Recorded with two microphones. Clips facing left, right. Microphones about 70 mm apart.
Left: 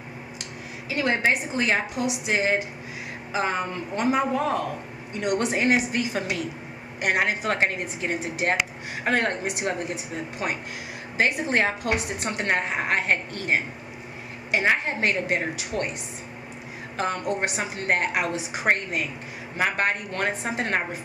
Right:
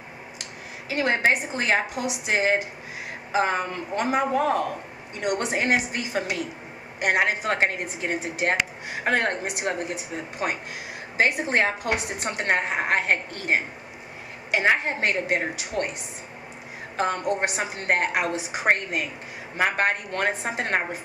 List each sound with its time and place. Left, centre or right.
0.8 s a woman's voice: right
5.2 s a woman's voice: right
11.1 s a woman's voice: right
14.5 s a woman's voice: right
16.9 s a woman's voice: right
18.3 s a woman's voice: right